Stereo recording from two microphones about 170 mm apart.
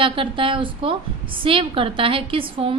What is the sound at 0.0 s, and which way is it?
A woman's voice, 30° right (ahead or behind).